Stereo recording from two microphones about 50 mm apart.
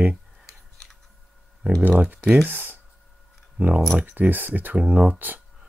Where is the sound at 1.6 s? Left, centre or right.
Right.